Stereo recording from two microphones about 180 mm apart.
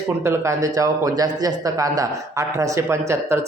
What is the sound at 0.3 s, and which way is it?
A man's voice, 15° right (ahead or behind).